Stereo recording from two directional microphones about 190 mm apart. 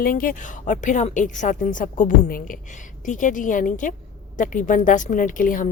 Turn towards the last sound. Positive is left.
turn(degrees=45)  # may be behind; listen again after turning